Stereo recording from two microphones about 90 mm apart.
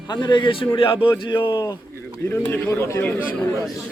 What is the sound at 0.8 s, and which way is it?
Speech, 75° left (ahead or behind).